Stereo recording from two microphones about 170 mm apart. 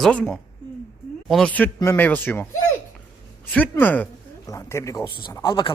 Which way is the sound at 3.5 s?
10° left (ahead or behind).